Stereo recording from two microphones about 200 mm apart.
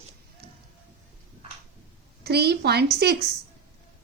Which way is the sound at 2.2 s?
55° right (ahead or behind).